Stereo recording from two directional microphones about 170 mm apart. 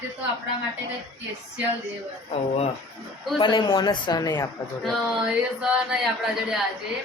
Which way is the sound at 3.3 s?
30° left (ahead or behind).